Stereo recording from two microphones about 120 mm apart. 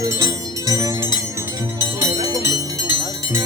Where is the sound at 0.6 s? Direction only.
30° right (ahead or behind).